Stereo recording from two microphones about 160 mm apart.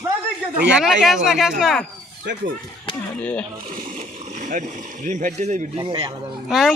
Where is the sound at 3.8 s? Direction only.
55° right (ahead or behind).